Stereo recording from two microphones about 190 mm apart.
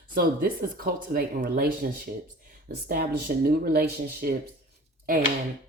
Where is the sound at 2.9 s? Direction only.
55° right (ahead or behind).